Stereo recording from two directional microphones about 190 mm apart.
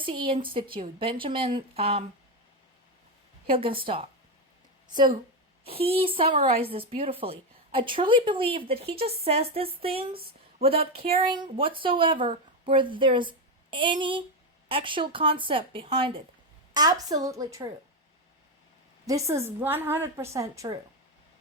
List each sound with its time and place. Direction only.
0.0 s a woman's voice: 25° right (ahead or behind)
3.4 s a woman's voice: 30° right (ahead or behind)
5.6 s a woman's voice: 30° right (ahead or behind)
19.0 s a woman's voice: 15° right (ahead or behind)